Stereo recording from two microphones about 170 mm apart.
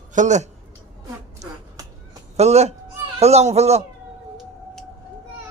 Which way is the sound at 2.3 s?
40° right (ahead or behind).